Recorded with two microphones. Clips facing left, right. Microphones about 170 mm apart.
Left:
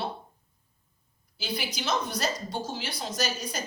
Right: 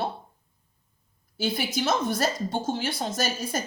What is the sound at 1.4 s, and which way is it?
A woman's voice, 50° right (ahead or behind).